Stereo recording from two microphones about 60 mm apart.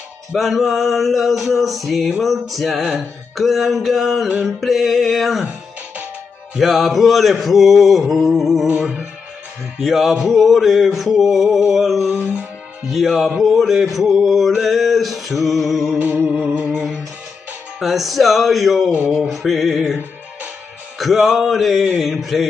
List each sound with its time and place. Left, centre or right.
0.3 s mantra: centre
2.8 s speech: centre
3.3 s mantra: centre
6.6 s mantra: centre
9.8 s mantra: centre
16.5 s music: centre
17.7 s mantra: centre
18.9 s a sound: right
19.1 s mantra: centre
21.0 s mantra: centre